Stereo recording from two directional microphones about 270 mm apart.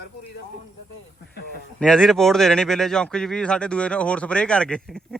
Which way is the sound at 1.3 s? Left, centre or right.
Left.